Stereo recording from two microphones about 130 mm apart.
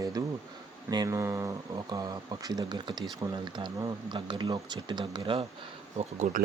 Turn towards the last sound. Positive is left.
turn(degrees=-65)  # may be behind; listen again after turning